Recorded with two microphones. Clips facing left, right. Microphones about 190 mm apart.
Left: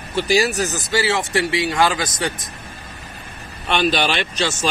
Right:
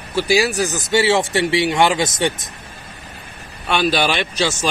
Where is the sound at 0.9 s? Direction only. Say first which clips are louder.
Right 5 dB; 25° right (ahead or behind).